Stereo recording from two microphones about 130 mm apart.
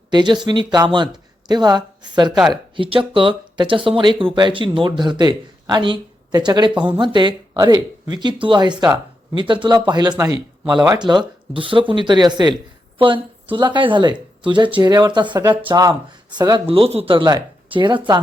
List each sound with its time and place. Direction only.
0.1 s speech: 35° right (ahead or behind)
2.3 s speech: 5° right (ahead or behind)
2.7 s speech: 40° right (ahead or behind)
16.6 s speech: 45° right (ahead or behind)
17.2 s speech: 35° right (ahead or behind)